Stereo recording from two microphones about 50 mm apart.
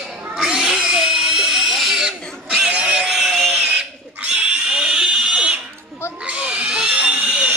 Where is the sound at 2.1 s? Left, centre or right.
Centre.